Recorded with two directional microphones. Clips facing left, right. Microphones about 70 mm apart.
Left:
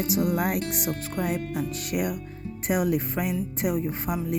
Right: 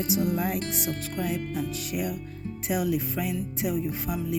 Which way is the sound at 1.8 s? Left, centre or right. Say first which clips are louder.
Left 3 dB; left.